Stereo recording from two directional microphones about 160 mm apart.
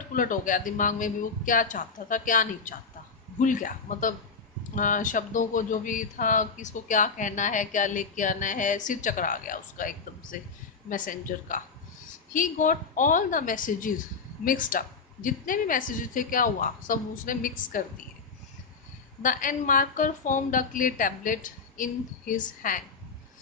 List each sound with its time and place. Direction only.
0.1 s a woman's voice: 55° left (ahead or behind)
19.2 s a woman's voice: 60° left (ahead or behind)